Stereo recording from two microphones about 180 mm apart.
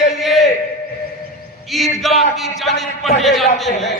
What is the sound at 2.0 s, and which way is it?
Speech, centre (ahead or behind).